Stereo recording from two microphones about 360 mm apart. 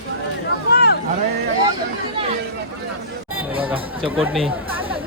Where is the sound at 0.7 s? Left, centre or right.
Left.